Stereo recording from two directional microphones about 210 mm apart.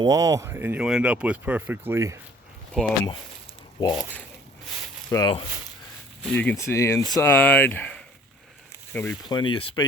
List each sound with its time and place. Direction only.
0.0 s speech: 20° right (ahead or behind)
2.7 s speech: 5° left (ahead or behind)
5.1 s speech: 20° left (ahead or behind)
6.2 s speech: 5° left (ahead or behind)
9.4 s speech: 20° left (ahead or behind)